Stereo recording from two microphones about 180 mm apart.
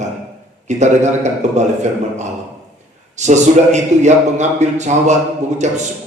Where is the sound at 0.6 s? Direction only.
40° right (ahead or behind).